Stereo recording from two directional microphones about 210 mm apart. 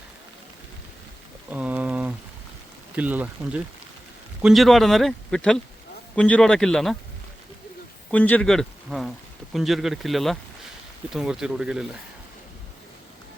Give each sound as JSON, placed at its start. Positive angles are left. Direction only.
{"t": 1.5, "sound": "a sound", "side_deg": -5}
{"t": 2.9, "sound": "a man's voice", "side_deg": -5}
{"t": 8.1, "sound": "a man's voice", "side_deg": 5}